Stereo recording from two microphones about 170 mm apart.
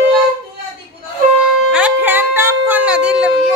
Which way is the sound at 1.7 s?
5° right (ahead or behind).